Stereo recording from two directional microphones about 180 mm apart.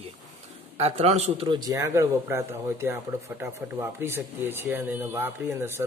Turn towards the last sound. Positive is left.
turn(degrees=-15)  # may be behind; listen again after turning